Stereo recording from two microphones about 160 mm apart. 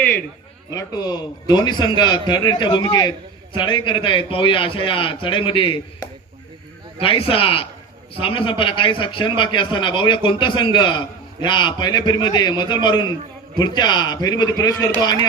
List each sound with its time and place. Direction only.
0.0 s a sound: 10° left (ahead or behind)
0.7 s a man's voice: 25° left (ahead or behind)
7.0 s a man's voice: 35° left (ahead or behind)